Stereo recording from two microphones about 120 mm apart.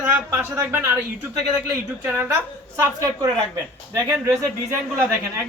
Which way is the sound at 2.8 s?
25° right (ahead or behind).